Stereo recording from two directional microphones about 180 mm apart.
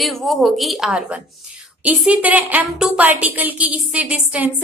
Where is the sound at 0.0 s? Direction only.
Centre (ahead or behind).